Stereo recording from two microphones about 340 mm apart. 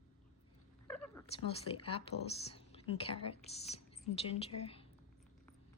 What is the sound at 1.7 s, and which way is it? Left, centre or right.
Speech, centre.